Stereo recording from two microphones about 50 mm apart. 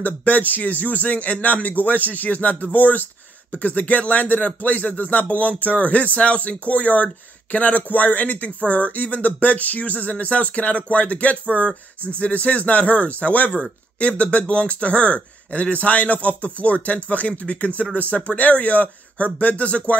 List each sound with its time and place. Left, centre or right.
0.0 s a man's voice: left